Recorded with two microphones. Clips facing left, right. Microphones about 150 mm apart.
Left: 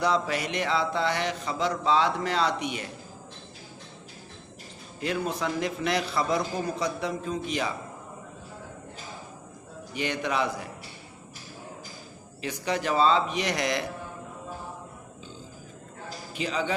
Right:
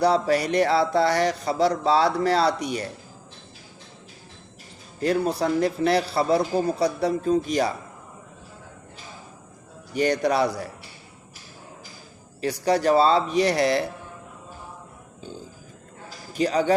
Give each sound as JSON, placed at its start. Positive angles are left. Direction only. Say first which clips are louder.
{"t": 0.0, "sound": "speech", "louder": "right 6 dB", "side_deg": -35}
{"t": 4.9, "sound": "speech", "louder": "right 7 dB", "side_deg": -40}
{"t": 9.9, "sound": "speech", "louder": "right 8 dB", "side_deg": -40}
{"t": 12.4, "sound": "speech", "louder": "right 7 dB", "side_deg": -35}
{"t": 16.3, "sound": "a man's voice", "louder": "right 8 dB", "side_deg": -40}